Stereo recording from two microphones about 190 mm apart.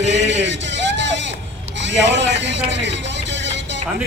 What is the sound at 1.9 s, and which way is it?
A man's voice, 70° right (ahead or behind).